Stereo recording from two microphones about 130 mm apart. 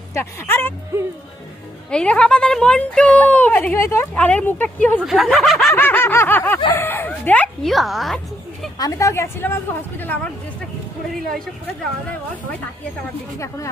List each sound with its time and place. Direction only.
0.1 s speech: 20° left (ahead or behind)
0.9 s speech: 20° right (ahead or behind)
1.9 s speech: 5° left (ahead or behind)
4.9 s snicker: centre (ahead or behind)
5.7 s speech: 15° left (ahead or behind); by 8.2 s centre (ahead or behind)
8.8 s speech: 25° left (ahead or behind)